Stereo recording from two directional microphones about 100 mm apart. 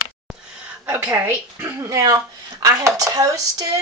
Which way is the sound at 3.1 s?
35° right (ahead or behind).